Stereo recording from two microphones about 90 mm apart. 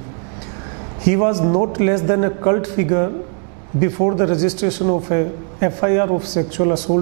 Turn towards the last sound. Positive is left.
turn(degrees=-20)  # may be behind; listen again after turning